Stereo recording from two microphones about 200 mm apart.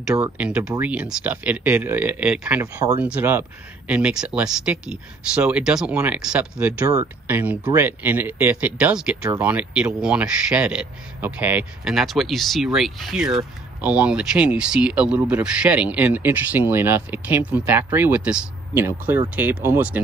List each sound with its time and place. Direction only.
0.1 s a man's voice: 10° right (ahead or behind)